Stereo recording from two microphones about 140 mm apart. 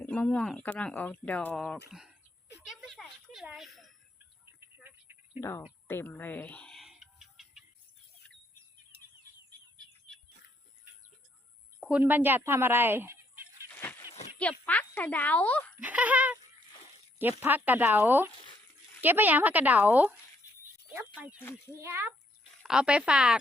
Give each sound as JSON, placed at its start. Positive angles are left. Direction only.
{"t": 0.0, "sound": "speech", "side_deg": 10}
{"t": 2.6, "sound": "a sound", "side_deg": 0}
{"t": 4.8, "sound": "a sound", "side_deg": -15}
{"t": 5.4, "sound": "speech", "side_deg": 20}
{"t": 5.9, "sound": "bird", "side_deg": 15}
{"t": 11.8, "sound": "speech", "side_deg": -10}
{"t": 13.7, "sound": "a sound", "side_deg": 15}
{"t": 14.3, "sound": "speech", "side_deg": 10}
{"t": 15.8, "sound": "a woman's voice", "side_deg": -10}
{"t": 17.4, "sound": "a woman's voice", "side_deg": -15}
{"t": 21.2, "sound": "a woman's voice", "side_deg": -10}
{"t": 22.6, "sound": "speech", "side_deg": -5}